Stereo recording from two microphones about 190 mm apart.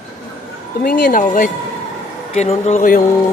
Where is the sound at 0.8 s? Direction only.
50° left (ahead or behind).